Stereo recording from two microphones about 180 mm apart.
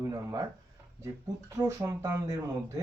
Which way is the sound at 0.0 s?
20° right (ahead or behind).